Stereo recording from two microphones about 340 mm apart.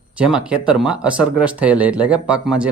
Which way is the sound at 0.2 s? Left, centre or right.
Centre.